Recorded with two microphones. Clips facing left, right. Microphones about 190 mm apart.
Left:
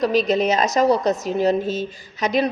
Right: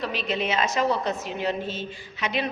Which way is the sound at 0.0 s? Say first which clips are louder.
Left 10 dB; 40° left (ahead or behind).